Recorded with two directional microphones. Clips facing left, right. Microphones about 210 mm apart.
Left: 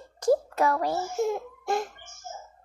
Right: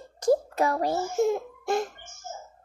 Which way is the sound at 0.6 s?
35° right (ahead or behind).